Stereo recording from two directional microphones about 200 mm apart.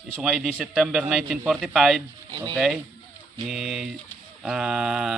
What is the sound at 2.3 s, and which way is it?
Speech, 25° right (ahead or behind).